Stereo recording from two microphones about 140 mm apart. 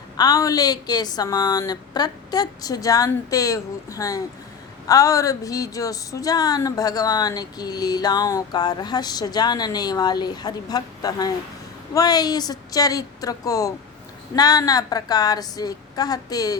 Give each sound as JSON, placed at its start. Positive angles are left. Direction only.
{"t": 0.2, "sound": "a woman's voice", "side_deg": 25}